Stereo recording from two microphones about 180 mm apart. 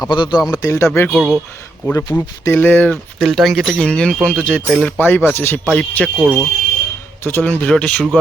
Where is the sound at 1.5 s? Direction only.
15° left (ahead or behind).